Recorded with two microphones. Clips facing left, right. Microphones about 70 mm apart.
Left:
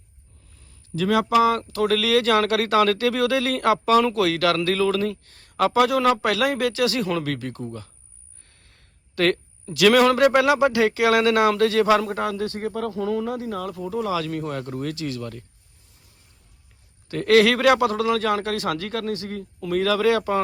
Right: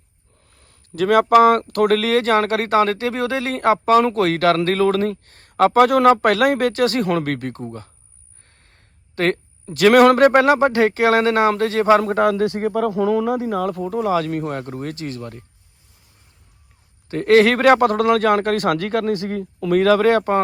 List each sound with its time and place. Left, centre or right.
0.5 s speech: right
12.5 s speech: centre
13.7 s speech: right
17.1 s speech: right
19.2 s speech: centre
19.7 s speech: right